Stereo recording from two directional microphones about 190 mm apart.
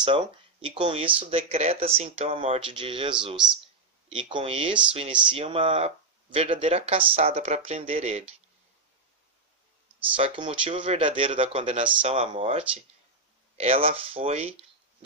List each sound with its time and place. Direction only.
0.0 s speech: 25° right (ahead or behind)
10.1 s speech: 30° right (ahead or behind)